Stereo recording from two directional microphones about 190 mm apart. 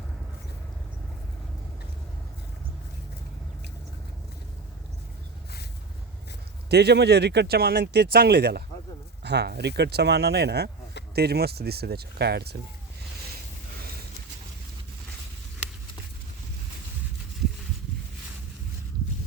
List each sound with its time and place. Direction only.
6.7 s speech: 60° right (ahead or behind)